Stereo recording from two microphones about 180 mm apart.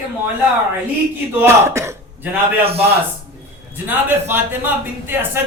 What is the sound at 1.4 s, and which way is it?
Speech, 15° right (ahead or behind).